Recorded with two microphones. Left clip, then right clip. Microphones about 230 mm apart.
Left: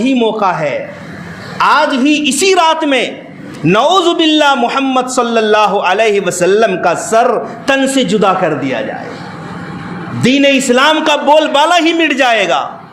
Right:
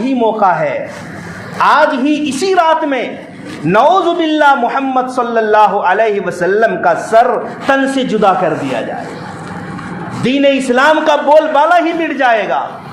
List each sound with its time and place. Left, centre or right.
0.0 s a man's voice: left
10.2 s a man's voice: left